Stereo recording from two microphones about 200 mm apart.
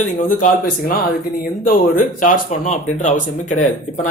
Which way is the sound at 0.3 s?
40° left (ahead or behind).